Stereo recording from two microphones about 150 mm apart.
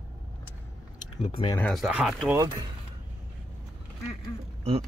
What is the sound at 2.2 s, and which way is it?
Speech, 20° right (ahead or behind).